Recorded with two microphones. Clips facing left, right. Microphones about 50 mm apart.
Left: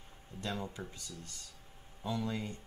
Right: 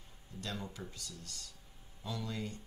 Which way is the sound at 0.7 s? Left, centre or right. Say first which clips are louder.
Left 2 dB; left.